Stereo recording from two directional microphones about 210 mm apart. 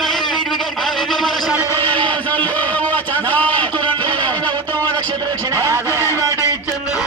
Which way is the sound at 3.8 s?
25° right (ahead or behind).